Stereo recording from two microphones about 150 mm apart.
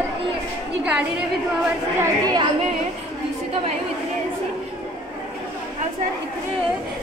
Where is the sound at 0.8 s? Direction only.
5° right (ahead or behind).